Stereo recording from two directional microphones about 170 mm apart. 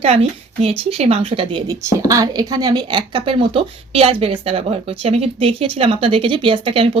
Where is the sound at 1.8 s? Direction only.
20° right (ahead or behind).